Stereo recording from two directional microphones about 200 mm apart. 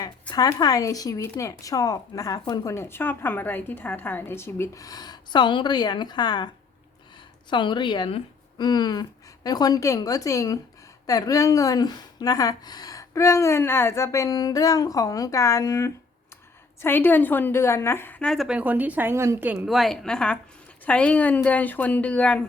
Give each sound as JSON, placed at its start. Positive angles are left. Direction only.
{"t": 0.0, "sound": "speech", "side_deg": 20}
{"t": 7.5, "sound": "a woman's voice", "side_deg": 25}